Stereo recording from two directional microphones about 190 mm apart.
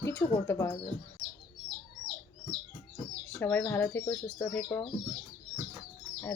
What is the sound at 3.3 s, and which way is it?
Speech, 10° left (ahead or behind).